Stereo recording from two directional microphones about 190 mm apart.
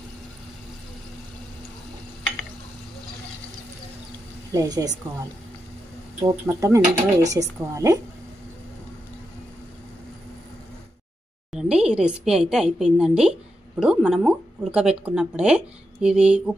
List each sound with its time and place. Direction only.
4.5 s a woman's voice: 20° right (ahead or behind)
6.2 s speech: 15° right (ahead or behind)
11.5 s a woman's voice: 5° right (ahead or behind)